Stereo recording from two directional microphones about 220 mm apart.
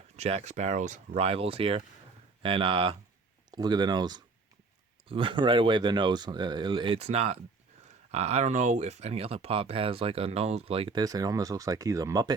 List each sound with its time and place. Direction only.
0.2 s speech: 30° right (ahead or behind)